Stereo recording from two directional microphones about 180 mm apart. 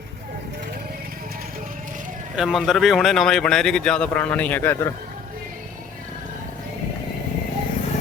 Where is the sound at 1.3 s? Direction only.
55° right (ahead or behind).